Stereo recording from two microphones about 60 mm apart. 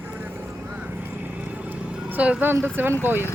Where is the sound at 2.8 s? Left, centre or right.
Right.